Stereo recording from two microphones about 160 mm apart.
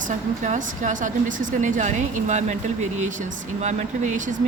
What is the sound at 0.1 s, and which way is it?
Speech, 50° right (ahead or behind).